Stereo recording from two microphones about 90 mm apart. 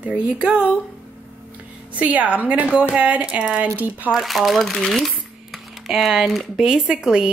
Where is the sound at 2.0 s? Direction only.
15° right (ahead or behind).